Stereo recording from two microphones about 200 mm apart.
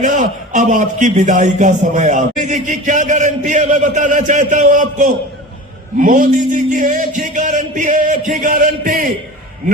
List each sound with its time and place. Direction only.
0.0 s a man's voice: 40° right (ahead or behind)